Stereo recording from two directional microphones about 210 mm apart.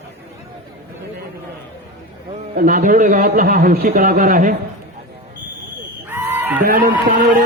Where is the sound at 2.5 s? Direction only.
45° right (ahead or behind).